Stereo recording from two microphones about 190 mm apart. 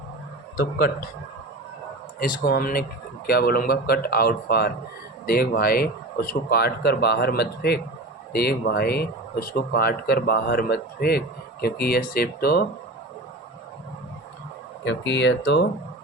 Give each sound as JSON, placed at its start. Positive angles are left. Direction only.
{"t": 0.5, "sound": "a man's voice", "side_deg": 55}
{"t": 2.1, "sound": "a man's voice", "side_deg": 50}
{"t": 14.8, "sound": "speech", "side_deg": 70}